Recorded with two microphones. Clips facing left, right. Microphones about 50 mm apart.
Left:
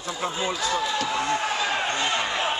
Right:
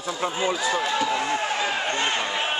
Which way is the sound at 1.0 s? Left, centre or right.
Centre.